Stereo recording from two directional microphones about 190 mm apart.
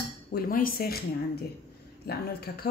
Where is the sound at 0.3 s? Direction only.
50° left (ahead or behind).